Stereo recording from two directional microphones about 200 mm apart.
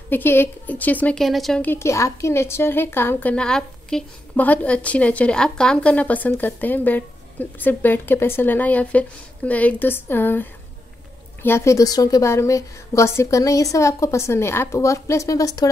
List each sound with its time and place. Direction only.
0.1 s a woman's voice: 10° left (ahead or behind)